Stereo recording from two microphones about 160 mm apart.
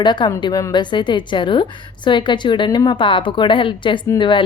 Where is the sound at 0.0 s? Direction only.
30° left (ahead or behind).